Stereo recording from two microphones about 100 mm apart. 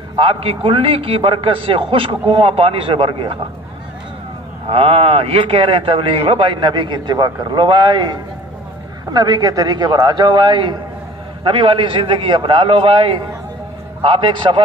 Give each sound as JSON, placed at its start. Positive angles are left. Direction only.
{"t": 0.2, "sound": "a man's voice", "side_deg": -70}
{"t": 4.6, "sound": "a man's voice", "side_deg": -70}